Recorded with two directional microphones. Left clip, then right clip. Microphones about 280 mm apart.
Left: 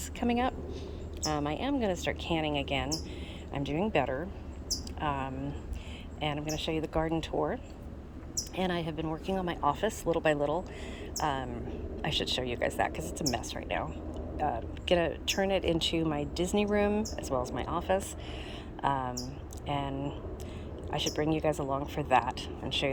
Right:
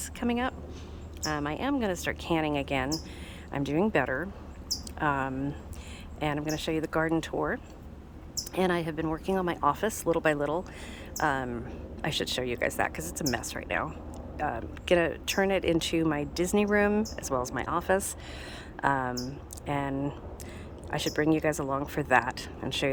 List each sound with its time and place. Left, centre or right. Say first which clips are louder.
0.2 s speech: even; centre
8.5 s speech: right 5 dB; centre